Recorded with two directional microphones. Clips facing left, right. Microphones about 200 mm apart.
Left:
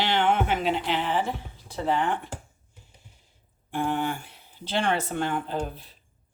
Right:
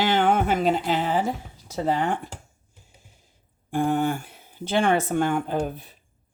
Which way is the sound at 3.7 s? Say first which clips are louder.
Right 5 dB; 45° right (ahead or behind).